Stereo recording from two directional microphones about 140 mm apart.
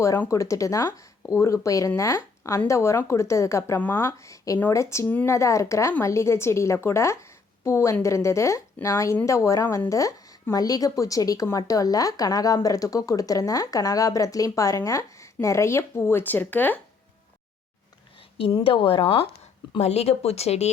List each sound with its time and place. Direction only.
0.0 s a woman's voice: 20° left (ahead or behind)
18.6 s a woman's voice: 40° left (ahead or behind)